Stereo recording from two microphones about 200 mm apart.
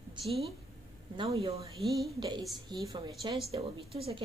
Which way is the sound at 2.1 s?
20° right (ahead or behind).